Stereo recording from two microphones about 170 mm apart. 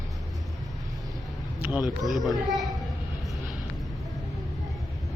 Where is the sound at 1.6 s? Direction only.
10° right (ahead or behind).